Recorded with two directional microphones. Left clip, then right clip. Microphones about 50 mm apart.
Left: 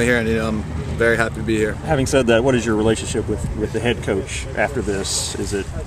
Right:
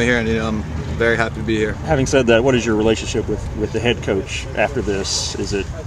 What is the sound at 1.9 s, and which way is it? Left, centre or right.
Speech, right.